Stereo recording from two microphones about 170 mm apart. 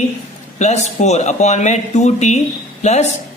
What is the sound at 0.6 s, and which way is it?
A man's voice, 40° left (ahead or behind).